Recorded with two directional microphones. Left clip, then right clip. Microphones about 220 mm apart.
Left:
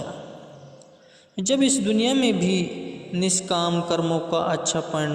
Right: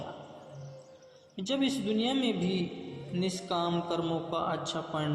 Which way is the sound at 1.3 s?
50° left (ahead or behind).